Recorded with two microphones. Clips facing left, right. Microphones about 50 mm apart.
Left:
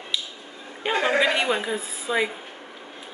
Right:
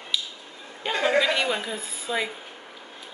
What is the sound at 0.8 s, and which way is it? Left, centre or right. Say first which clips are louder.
A woman's voice: left 1 dB; centre.